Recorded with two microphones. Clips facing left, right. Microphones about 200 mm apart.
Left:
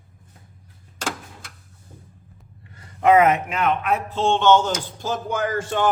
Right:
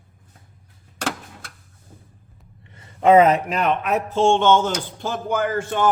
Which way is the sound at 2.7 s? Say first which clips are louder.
Right 2 dB; 25° right (ahead or behind).